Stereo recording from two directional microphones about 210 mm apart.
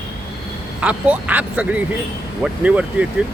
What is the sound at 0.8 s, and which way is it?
Speech, 5° right (ahead or behind).